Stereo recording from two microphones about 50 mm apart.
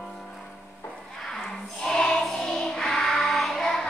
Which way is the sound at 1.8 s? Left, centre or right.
Centre.